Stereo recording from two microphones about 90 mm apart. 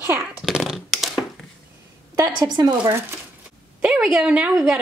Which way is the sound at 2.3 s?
55° right (ahead or behind).